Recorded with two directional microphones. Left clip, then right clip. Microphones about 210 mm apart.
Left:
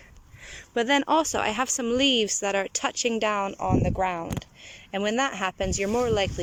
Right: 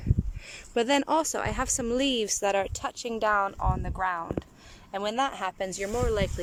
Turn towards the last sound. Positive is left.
turn(degrees=5)  # may be behind; listen again after turning